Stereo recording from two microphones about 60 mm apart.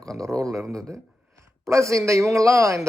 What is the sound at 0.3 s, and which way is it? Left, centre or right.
Speech, right.